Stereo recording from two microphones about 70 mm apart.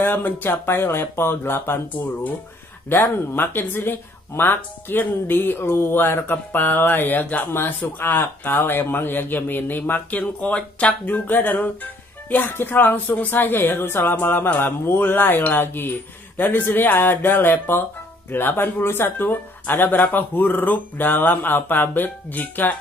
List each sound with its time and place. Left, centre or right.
0.0 s speech: left